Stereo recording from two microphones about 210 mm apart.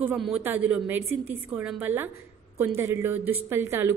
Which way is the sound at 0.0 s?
5° right (ahead or behind).